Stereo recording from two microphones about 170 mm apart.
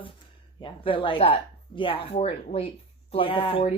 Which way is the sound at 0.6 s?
30° left (ahead or behind).